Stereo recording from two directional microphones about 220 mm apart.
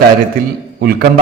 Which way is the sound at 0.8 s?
45° right (ahead or behind).